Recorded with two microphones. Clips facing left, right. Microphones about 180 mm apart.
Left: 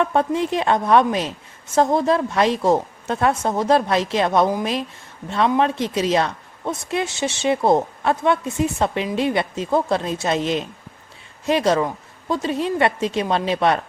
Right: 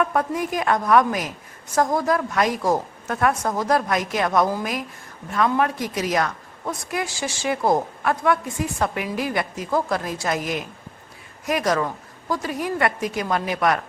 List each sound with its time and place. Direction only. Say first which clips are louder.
0.0 s a woman's voice: left 3 dB; 25° left (ahead or behind)